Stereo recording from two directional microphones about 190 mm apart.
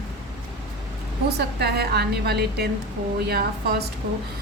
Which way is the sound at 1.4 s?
55° right (ahead or behind).